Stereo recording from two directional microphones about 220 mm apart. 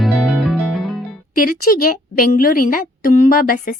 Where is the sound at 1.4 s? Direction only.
40° left (ahead or behind).